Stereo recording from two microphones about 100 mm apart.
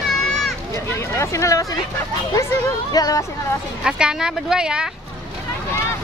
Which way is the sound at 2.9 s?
40° left (ahead or behind).